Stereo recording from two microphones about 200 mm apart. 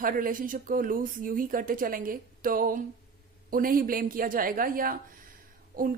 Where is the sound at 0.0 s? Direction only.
45° right (ahead or behind).